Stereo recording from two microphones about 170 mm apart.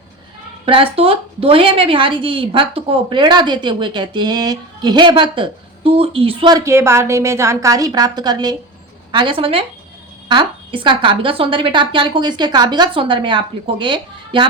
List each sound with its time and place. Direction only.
0.6 s a woman's voice: 30° right (ahead or behind)
6.7 s a woman's voice: 15° right (ahead or behind)